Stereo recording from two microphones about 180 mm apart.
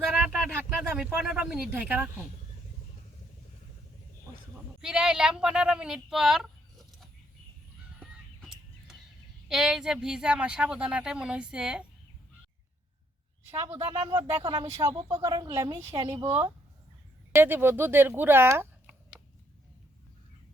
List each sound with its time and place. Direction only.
0.8 s speech: 5° right (ahead or behind)
4.8 s speech: 5° right (ahead or behind)
9.5 s speech: 5° right (ahead or behind)
13.8 s a woman's voice: 30° right (ahead or behind)
15.8 s a woman's voice: 35° right (ahead or behind)
17.3 s speech: 10° right (ahead or behind)